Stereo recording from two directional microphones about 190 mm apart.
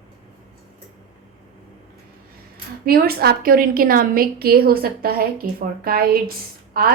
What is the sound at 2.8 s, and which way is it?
A woman's voice, 55° right (ahead or behind).